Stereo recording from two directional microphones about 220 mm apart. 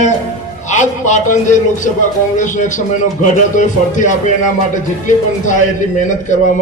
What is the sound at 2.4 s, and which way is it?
A man's voice, 35° left (ahead or behind).